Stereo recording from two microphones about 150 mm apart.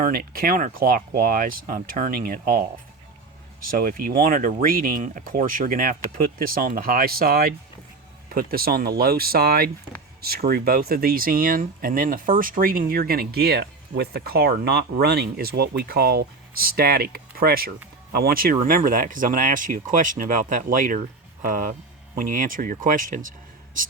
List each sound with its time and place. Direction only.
0.0 s speech: 75° right (ahead or behind)
3.7 s speech: 70° right (ahead or behind)
18.6 s speech: 65° right (ahead or behind)